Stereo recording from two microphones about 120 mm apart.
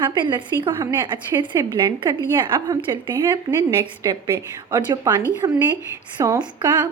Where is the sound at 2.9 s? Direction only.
20° right (ahead or behind).